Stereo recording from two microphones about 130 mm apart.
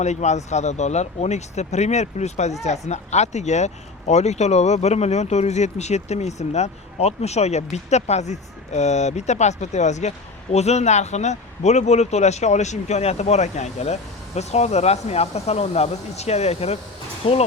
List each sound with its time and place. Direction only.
0.0 s speech: 60° left (ahead or behind)
17.2 s speech: 45° left (ahead or behind)